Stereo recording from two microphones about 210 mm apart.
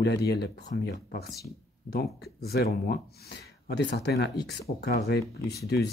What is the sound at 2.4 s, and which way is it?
Speech, 50° left (ahead or behind).